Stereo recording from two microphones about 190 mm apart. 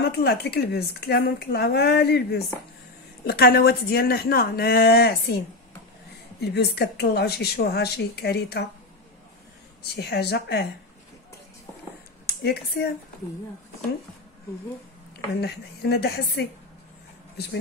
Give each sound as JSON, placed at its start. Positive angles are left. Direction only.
{"t": 0.2, "sound": "speech", "side_deg": 60}
{"t": 6.4, "sound": "speech", "side_deg": 60}
{"t": 9.8, "sound": "speech", "side_deg": 60}
{"t": 12.3, "sound": "speech", "side_deg": 55}
{"t": 15.4, "sound": "speech", "side_deg": 60}